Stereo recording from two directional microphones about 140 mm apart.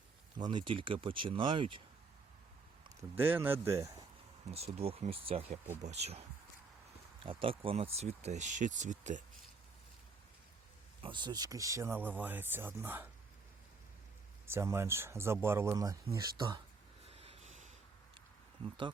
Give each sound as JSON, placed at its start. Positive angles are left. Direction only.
{"t": 0.3, "sound": "speech", "side_deg": -35}
{"t": 3.0, "sound": "speech", "side_deg": -15}
{"t": 4.5, "sound": "speech", "side_deg": -45}
{"t": 7.3, "sound": "speech", "side_deg": -40}
{"t": 11.0, "sound": "speech", "side_deg": -35}
{"t": 14.4, "sound": "speech", "side_deg": -20}
{"t": 17.1, "sound": "snort", "side_deg": -45}